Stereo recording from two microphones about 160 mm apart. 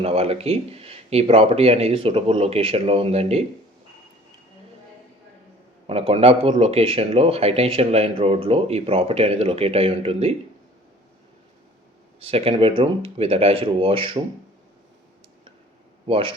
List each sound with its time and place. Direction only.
0.0 s speech: 40° right (ahead or behind)
5.9 s speech: 40° right (ahead or behind)
12.2 s speech: 35° right (ahead or behind)
16.0 s speech: 35° right (ahead or behind)